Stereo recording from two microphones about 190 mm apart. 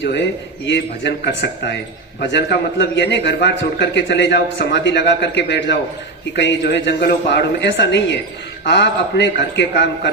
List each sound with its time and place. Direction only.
0.0 s a man's voice: 65° left (ahead or behind)